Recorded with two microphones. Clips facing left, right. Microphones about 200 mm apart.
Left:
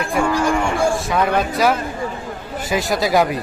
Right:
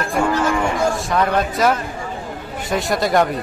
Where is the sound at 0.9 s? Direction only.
Centre (ahead or behind).